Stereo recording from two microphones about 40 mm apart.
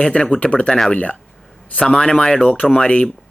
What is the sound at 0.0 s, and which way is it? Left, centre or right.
Speech, left.